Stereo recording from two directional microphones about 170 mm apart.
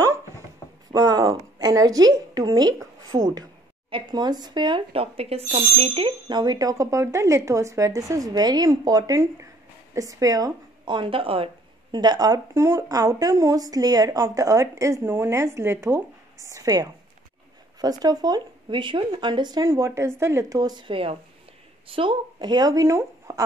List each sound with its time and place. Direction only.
0.9 s speech: 20° right (ahead or behind)